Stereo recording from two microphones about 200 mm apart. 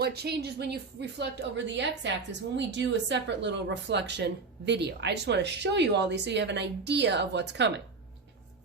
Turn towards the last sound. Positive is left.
turn(degrees=-60)  # may be behind; listen again after turning